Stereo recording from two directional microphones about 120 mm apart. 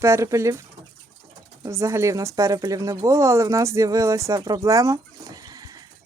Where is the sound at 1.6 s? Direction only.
25° right (ahead or behind).